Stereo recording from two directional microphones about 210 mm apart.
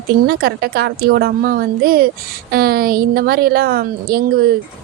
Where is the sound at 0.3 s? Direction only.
45° right (ahead or behind).